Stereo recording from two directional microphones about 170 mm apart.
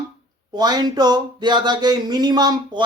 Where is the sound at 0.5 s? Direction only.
25° right (ahead or behind).